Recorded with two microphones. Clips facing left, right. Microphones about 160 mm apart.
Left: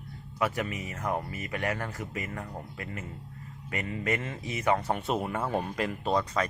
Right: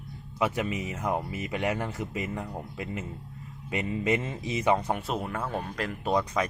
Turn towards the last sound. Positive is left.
turn(degrees=-15)  # may be behind; listen again after turning